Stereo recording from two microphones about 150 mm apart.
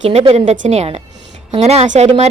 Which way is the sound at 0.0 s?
50° right (ahead or behind).